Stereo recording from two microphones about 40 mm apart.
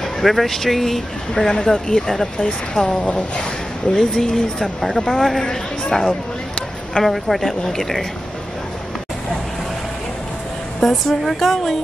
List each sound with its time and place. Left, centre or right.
0.2 s a woman's voice: centre
1.3 s speech: centre
2.3 s speech: left
3.0 s a woman's voice: left
3.9 s a woman's voice: centre
10.8 s a woman's voice: centre